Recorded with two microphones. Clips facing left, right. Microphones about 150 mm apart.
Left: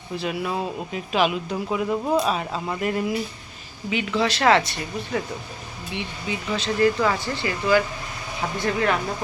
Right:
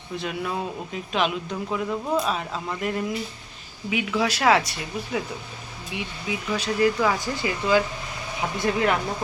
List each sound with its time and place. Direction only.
0.2 s speech: 5° left (ahead or behind); by 9.0 s 20° right (ahead or behind)